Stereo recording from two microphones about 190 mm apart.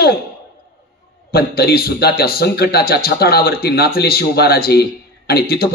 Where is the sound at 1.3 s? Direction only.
55° left (ahead or behind).